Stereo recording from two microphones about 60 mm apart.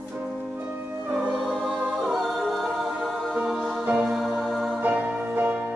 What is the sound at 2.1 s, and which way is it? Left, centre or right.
A capella, centre.